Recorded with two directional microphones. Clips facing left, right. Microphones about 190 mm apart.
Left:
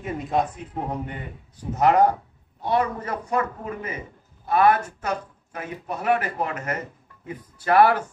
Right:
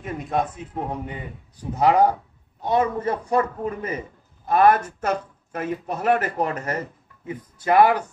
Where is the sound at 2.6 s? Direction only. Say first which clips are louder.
Right 3 dB; 20° right (ahead or behind).